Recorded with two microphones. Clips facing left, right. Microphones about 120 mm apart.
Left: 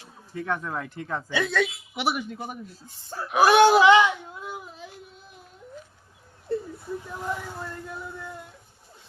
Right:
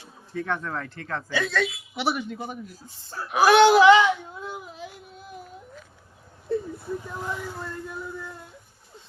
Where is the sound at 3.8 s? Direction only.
20° left (ahead or behind).